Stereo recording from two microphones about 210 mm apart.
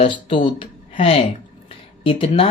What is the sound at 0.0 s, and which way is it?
Speech, 25° left (ahead or behind).